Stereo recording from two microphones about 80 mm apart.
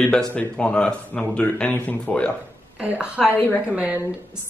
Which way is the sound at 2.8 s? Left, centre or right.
Centre.